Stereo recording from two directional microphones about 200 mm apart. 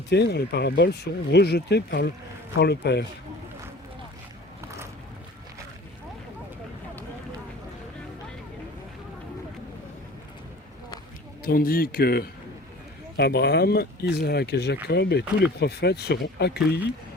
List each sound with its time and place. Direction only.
0.1 s speech: 55° left (ahead or behind)
11.4 s speech: 45° left (ahead or behind)